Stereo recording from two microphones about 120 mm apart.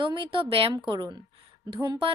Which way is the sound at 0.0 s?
45° right (ahead or behind).